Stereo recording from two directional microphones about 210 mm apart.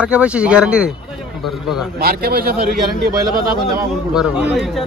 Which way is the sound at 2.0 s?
45° right (ahead or behind).